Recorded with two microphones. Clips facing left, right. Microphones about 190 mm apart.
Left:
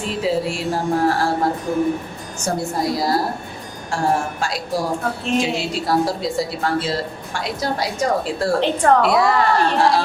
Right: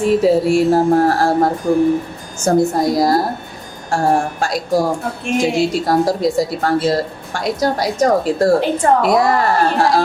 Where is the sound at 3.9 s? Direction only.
45° right (ahead or behind).